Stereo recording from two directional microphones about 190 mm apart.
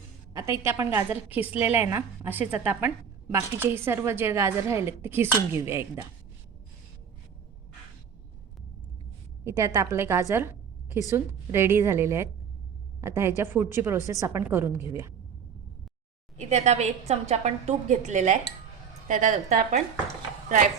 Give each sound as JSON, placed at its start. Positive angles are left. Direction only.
{"t": 0.3, "sound": "a woman's voice", "side_deg": -15}
{"t": 9.4, "sound": "a woman's voice", "side_deg": -15}
{"t": 16.4, "sound": "a woman's voice", "side_deg": -35}